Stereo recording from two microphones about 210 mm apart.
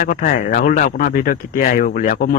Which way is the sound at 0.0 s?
40° left (ahead or behind).